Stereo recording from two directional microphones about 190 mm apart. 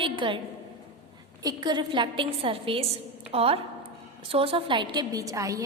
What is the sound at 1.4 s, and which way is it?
A woman's voice, 20° right (ahead or behind).